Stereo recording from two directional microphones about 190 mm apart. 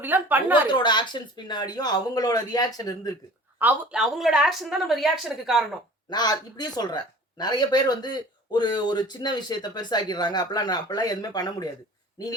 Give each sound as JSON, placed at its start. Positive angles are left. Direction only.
{"t": 0.0, "sound": "a woman's voice", "side_deg": -10}
{"t": 0.7, "sound": "speech", "side_deg": 25}
{"t": 3.6, "sound": "speech", "side_deg": -5}
{"t": 6.1, "sound": "speech", "side_deg": 20}